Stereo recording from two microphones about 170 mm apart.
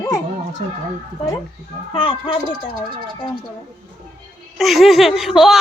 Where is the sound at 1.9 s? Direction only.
30° left (ahead or behind).